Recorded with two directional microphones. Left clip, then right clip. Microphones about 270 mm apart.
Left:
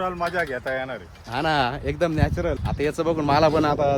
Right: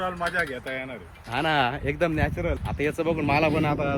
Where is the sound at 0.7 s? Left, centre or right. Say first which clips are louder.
Left 5 dB; left.